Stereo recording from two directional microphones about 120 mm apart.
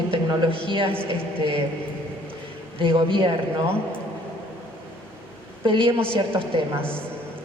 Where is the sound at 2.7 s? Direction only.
45° right (ahead or behind).